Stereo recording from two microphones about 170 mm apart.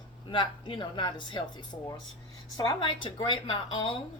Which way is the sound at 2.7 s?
30° left (ahead or behind).